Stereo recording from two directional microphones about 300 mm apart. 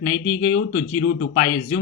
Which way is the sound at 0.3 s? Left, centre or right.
Left.